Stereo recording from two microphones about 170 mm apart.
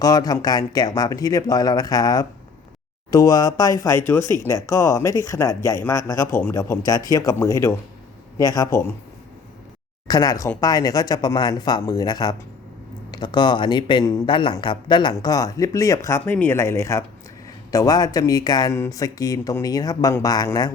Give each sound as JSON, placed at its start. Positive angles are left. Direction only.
{"t": 0.0, "sound": "speech", "side_deg": 20}
{"t": 10.1, "sound": "speech", "side_deg": 20}